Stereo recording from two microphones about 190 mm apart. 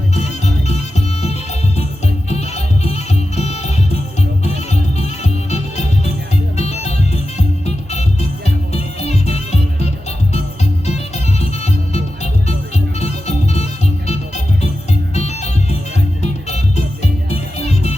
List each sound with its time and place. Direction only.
0.2 s music: 35° left (ahead or behind)